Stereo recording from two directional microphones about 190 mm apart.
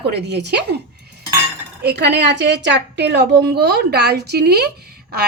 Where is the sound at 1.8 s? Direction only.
60° right (ahead or behind).